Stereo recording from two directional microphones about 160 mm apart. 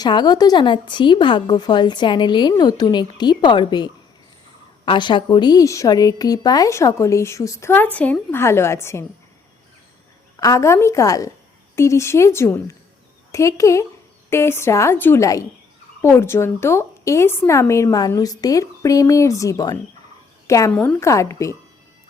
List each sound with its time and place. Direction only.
0.0 s a woman's voice: 25° left (ahead or behind)
10.4 s a woman's voice: 20° left (ahead or behind)
20.7 s a woman's voice: 10° left (ahead or behind)
21.1 s speech: 20° left (ahead or behind)